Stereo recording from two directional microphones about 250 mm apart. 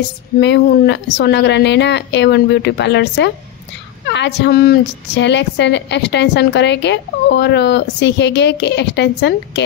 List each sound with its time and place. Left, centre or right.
0.4 s a woman's voice: left